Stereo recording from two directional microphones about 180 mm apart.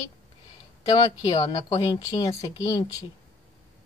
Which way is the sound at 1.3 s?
25° left (ahead or behind).